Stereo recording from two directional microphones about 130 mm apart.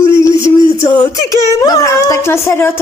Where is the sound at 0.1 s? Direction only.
20° left (ahead or behind).